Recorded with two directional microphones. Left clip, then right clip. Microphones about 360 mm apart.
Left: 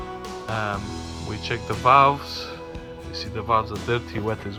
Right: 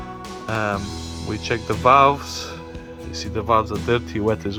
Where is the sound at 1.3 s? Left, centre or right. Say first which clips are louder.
Right 5 dB; centre.